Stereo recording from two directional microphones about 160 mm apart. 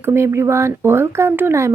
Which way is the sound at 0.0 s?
15° right (ahead or behind).